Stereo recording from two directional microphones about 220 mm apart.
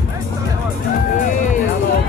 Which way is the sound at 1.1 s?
35° left (ahead or behind).